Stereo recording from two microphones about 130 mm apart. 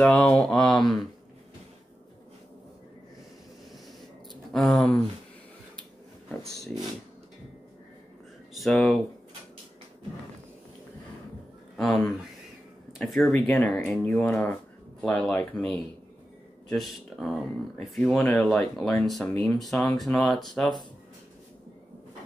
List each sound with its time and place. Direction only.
0.0 s speech: 10° left (ahead or behind)
4.5 s speech: 5° left (ahead or behind)
8.5 s speech: centre (ahead or behind)
11.7 s speech: 5° left (ahead or behind)